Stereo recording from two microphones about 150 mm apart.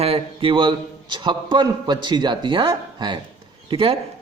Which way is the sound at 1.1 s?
30° right (ahead or behind).